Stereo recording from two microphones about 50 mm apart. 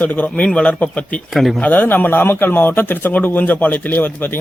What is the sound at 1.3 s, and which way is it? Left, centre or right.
Speech, centre.